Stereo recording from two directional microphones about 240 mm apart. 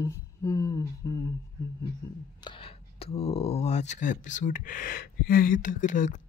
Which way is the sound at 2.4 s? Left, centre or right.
Left.